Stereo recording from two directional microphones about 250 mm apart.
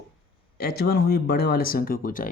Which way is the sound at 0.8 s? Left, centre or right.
Left.